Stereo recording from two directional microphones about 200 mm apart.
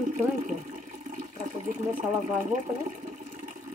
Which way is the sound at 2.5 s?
40° right (ahead or behind).